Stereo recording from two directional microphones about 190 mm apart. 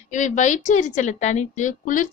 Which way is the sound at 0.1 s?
40° left (ahead or behind).